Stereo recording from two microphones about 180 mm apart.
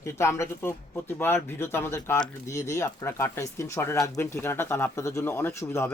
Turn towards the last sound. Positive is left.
turn(degrees=15)  # may be behind; listen again after turning